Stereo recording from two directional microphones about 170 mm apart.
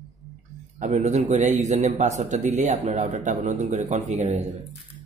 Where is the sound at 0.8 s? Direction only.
45° right (ahead or behind).